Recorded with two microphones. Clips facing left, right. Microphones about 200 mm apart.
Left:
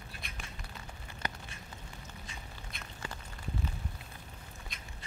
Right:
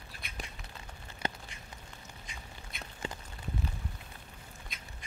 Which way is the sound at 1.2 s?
25° right (ahead or behind).